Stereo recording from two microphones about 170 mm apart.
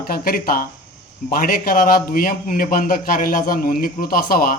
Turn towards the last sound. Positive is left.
turn(degrees=55)  # may be behind; listen again after turning